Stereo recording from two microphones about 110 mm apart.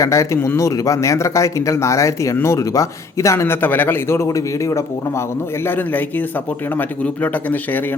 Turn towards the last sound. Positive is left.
turn(degrees=15)  # may be behind; listen again after turning